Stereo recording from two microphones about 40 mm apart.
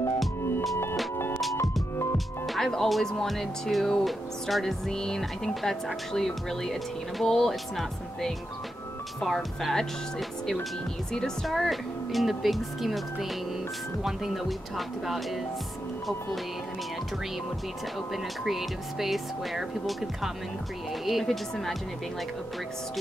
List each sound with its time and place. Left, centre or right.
1.1 s music: left
1.4 s music: centre
4.0 s a woman's voice: centre
5.5 s a woman's voice: centre
9.3 s speech: centre
11.4 s speech: centre
18.1 s a woman's voice: centre